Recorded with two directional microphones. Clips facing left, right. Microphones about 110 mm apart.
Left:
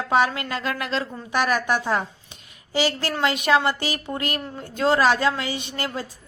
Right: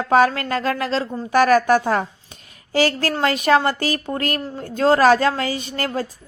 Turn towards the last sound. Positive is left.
turn(degrees=-45)  # may be behind; listen again after turning